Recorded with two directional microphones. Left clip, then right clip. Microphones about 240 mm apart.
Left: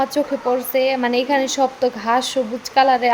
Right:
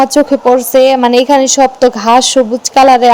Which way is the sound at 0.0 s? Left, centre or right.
Right.